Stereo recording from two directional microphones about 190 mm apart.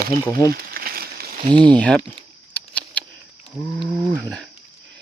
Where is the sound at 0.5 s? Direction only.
50° right (ahead or behind).